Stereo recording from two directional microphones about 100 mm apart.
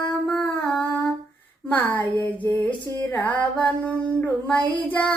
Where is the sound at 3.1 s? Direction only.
15° left (ahead or behind).